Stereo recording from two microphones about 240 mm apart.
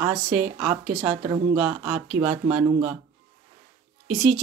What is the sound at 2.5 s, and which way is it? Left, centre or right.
Speech, right.